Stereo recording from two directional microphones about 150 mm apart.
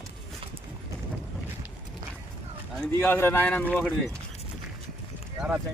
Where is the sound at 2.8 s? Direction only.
10° left (ahead or behind).